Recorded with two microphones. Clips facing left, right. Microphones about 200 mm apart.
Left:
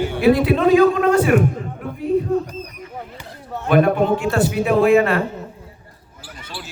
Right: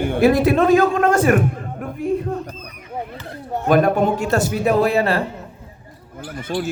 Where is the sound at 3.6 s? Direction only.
40° right (ahead or behind).